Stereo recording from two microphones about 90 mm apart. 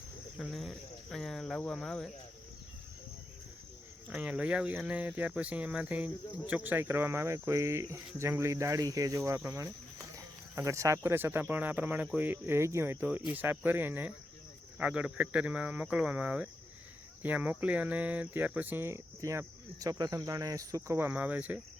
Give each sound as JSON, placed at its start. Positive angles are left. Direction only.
{"t": 0.3, "sound": "cricket", "side_deg": 0}
{"t": 4.1, "sound": "speech", "side_deg": -10}
{"t": 21.1, "sound": "speech", "side_deg": -15}